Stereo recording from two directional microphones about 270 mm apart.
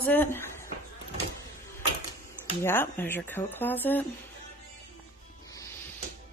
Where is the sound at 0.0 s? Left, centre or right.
Centre.